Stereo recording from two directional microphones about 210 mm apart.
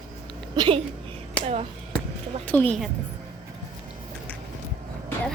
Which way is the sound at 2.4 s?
5° left (ahead or behind).